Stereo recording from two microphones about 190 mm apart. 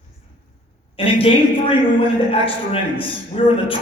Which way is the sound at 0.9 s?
30° left (ahead or behind).